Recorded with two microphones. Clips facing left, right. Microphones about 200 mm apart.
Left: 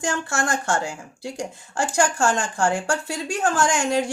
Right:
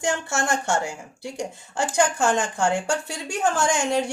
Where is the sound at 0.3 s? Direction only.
20° right (ahead or behind).